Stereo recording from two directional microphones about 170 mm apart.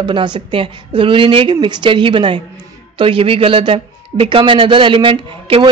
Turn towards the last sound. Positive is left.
turn(degrees=-30)  # may be behind; listen again after turning